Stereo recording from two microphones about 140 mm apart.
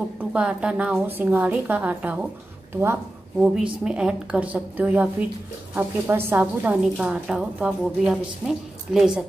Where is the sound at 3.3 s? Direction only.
Centre (ahead or behind).